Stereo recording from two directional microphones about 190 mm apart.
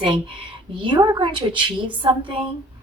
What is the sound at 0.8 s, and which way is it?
Speech, 25° right (ahead or behind).